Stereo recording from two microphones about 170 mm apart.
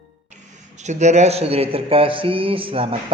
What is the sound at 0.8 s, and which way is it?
A man's voice, 40° right (ahead or behind).